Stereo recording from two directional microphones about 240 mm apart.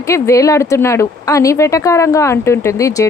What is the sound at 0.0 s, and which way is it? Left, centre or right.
Speech, centre.